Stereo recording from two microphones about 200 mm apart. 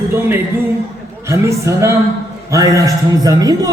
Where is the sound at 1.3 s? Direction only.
15° right (ahead or behind).